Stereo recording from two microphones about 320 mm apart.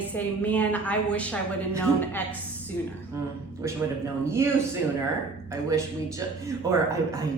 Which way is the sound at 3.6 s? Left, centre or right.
Centre.